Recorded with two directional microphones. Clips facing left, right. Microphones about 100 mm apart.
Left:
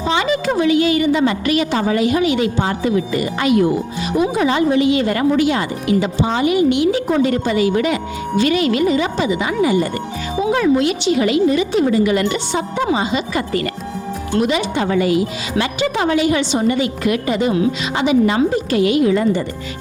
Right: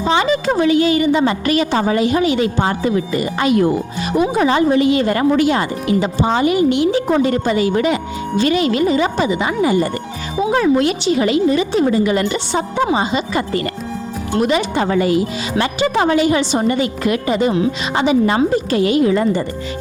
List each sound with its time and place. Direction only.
0.1 s speech: 30° right (ahead or behind)